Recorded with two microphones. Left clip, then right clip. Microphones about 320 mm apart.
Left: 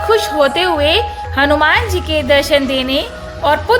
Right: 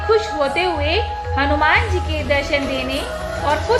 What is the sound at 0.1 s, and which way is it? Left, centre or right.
A woman's voice, left.